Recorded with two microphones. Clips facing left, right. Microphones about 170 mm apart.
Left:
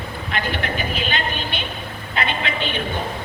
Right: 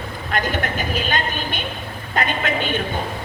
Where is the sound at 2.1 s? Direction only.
45° right (ahead or behind).